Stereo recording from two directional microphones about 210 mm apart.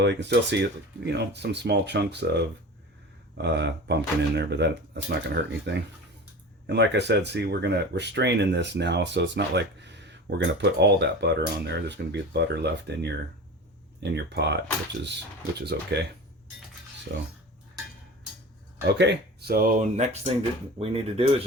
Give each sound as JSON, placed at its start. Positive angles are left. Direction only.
{"t": 0.0, "sound": "speech", "side_deg": -55}
{"t": 15.6, "sound": "speech", "side_deg": -55}
{"t": 17.1, "sound": "speech", "side_deg": -55}
{"t": 18.9, "sound": "speech", "side_deg": -55}